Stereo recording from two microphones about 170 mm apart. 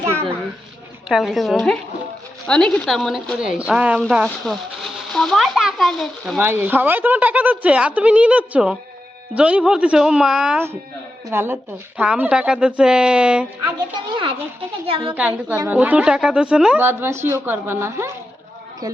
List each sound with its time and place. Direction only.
1.0 s a child's voice: centre (ahead or behind)
6.4 s a woman's voice: 10° right (ahead or behind)
14.8 s a woman's voice: 35° right (ahead or behind)
15.1 s a woman's voice: 10° right (ahead or behind)